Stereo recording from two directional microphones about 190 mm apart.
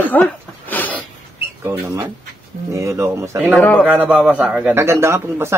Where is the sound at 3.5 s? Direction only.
5° left (ahead or behind).